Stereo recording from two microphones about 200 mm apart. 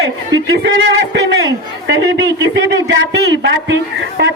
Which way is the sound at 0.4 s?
55° right (ahead or behind).